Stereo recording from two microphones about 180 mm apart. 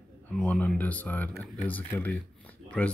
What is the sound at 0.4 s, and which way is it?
Speech, 5° left (ahead or behind).